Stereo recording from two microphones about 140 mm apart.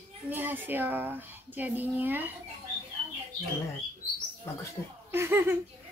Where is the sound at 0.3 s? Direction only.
15° right (ahead or behind).